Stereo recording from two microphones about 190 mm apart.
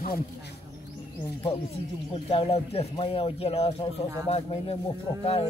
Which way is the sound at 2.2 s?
30° left (ahead or behind).